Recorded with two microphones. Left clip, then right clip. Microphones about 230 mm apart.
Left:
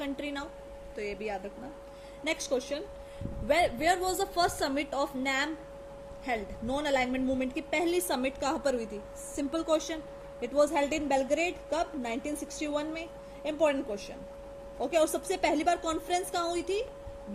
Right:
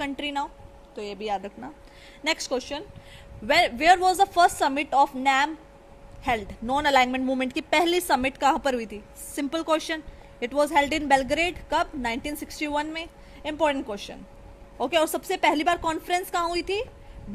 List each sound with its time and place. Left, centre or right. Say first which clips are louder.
0.0 s a woman's voice: right 7 dB; right
2.2 s a woman's voice: right 5 dB; right